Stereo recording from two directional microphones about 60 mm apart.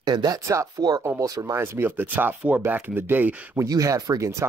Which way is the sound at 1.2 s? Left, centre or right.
Right.